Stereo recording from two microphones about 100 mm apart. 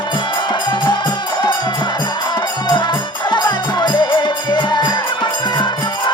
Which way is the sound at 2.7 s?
50° left (ahead or behind).